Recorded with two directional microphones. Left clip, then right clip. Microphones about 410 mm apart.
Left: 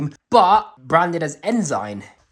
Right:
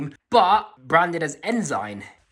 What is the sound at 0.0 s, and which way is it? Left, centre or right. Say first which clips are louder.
Speech: left 3 dB; centre.